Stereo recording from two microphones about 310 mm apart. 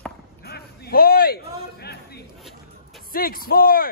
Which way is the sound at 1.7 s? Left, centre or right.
Left.